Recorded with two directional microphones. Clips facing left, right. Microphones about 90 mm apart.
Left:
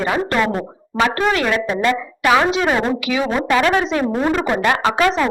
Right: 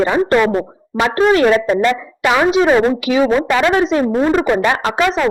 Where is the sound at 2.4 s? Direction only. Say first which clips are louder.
Right 5 dB; 15° right (ahead or behind).